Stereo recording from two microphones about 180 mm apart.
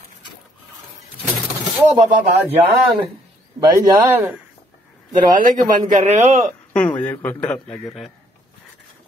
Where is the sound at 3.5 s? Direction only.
20° right (ahead or behind).